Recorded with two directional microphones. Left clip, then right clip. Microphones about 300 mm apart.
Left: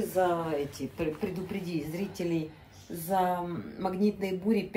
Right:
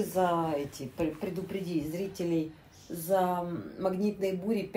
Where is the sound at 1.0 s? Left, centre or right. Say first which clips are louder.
Even; centre.